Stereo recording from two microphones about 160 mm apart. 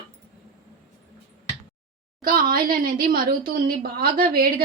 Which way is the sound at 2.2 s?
65° right (ahead or behind).